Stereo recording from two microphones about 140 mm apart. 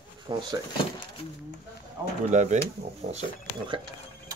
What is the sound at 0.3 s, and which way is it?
Speech, 35° right (ahead or behind).